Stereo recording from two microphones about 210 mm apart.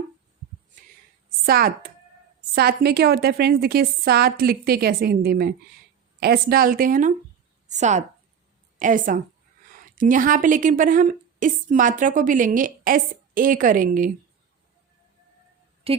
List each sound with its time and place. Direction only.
1.5 s a woman's voice: 45° right (ahead or behind)
15.9 s a woman's voice: 30° right (ahead or behind)